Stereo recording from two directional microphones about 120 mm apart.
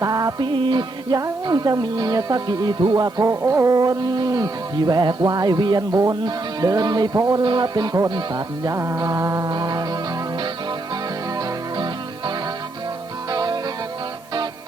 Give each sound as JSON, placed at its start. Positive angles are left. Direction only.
{"t": 0.0, "sound": "music", "side_deg": -30}
{"t": 1.2, "sound": "speech", "side_deg": -35}
{"t": 8.6, "sound": "music", "side_deg": -25}
{"t": 11.3, "sound": "music", "side_deg": -40}
{"t": 13.3, "sound": "music", "side_deg": -35}